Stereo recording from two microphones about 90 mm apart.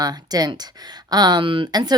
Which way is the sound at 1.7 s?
50° right (ahead or behind).